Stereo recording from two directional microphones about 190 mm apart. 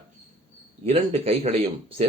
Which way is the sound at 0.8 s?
30° right (ahead or behind).